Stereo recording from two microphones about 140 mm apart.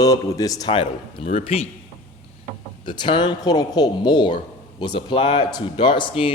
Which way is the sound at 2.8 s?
35° left (ahead or behind).